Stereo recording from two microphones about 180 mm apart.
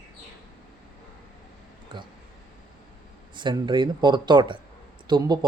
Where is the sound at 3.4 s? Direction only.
25° right (ahead or behind).